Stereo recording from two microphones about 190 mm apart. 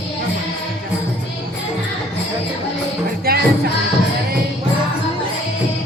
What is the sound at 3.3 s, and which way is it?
Music, 50° right (ahead or behind).